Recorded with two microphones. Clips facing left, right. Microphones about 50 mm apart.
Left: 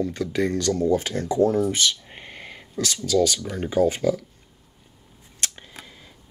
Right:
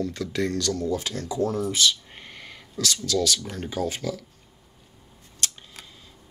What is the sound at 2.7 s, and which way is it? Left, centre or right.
Speech, centre.